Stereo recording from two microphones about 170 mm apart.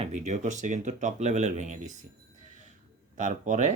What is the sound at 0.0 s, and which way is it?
Speech, 40° right (ahead or behind).